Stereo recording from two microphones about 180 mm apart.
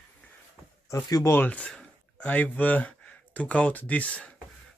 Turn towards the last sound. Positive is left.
turn(degrees=5)  # may be behind; listen again after turning